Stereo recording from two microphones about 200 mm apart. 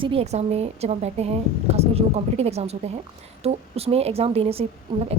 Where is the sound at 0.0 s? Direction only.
30° right (ahead or behind).